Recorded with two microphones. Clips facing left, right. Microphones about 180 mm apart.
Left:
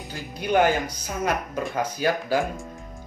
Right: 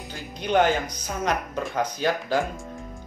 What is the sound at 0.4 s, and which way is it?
Speech, 10° left (ahead or behind).